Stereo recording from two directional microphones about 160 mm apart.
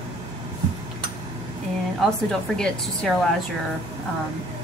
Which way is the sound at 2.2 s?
5° left (ahead or behind).